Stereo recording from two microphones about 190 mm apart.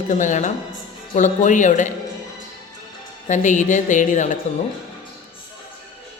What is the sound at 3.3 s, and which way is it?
A man's voice, 40° left (ahead or behind).